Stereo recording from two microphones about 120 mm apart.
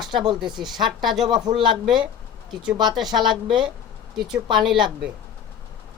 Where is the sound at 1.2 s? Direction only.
35° right (ahead or behind).